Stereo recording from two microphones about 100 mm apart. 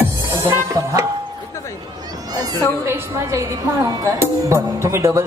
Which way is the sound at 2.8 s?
25° right (ahead or behind).